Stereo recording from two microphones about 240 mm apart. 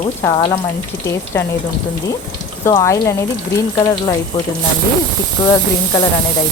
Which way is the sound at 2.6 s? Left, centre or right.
Centre.